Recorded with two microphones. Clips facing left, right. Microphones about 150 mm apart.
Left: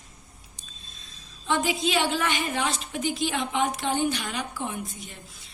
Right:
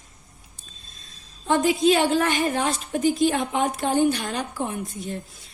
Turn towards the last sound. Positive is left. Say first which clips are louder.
# right 6 dB
turn(degrees=-50)  # may be behind; listen again after turning